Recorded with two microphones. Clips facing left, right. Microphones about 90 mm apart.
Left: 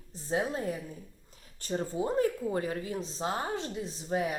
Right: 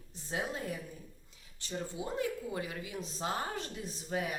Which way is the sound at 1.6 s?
40° left (ahead or behind).